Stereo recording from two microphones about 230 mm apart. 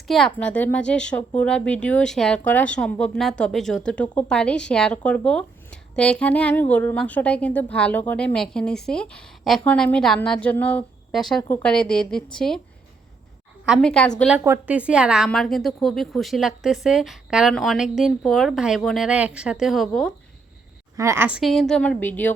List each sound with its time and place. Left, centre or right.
0.3 s speech: centre
13.7 s speech: centre
20.9 s speech: centre